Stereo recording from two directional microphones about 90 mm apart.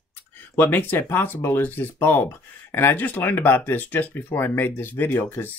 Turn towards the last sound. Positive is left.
turn(degrees=20)  # may be behind; listen again after turning